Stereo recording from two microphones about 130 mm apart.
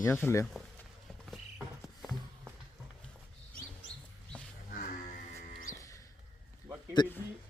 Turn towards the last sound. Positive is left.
turn(degrees=35)  # may be behind; listen again after turning